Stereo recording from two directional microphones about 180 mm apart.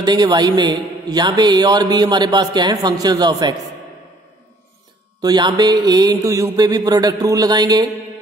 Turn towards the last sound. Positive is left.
turn(degrees=-20)  # may be behind; listen again after turning